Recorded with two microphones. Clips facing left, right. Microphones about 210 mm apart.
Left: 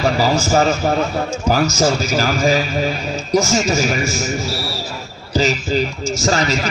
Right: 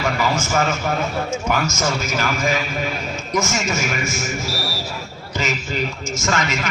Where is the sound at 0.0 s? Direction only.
35° left (ahead or behind).